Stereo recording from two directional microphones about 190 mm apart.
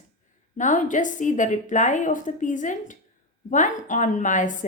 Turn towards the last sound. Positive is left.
turn(degrees=40)  # may be behind; listen again after turning